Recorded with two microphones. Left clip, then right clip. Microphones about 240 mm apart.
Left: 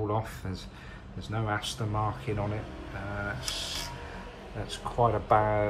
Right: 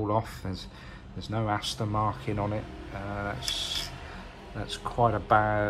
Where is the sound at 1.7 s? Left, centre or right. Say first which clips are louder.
Right 3 dB; right.